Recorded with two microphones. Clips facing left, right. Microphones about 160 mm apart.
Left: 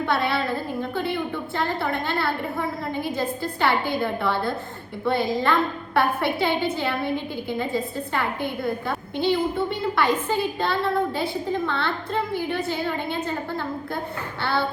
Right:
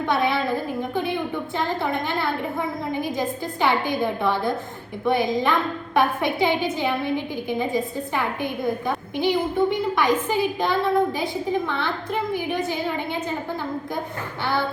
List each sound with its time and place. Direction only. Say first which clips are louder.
0.0 s a woman's voice: right 1 dB; 15° right (ahead or behind)